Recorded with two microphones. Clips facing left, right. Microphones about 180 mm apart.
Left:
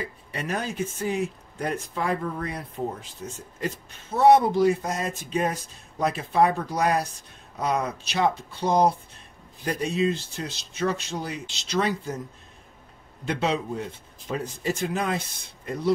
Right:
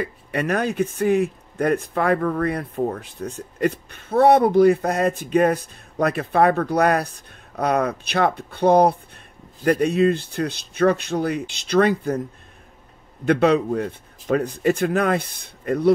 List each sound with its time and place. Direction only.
0.0 s speech: 60° right (ahead or behind)
13.3 s speech: 60° right (ahead or behind)